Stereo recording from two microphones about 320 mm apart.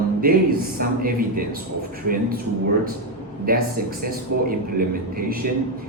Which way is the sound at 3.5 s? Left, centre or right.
Right.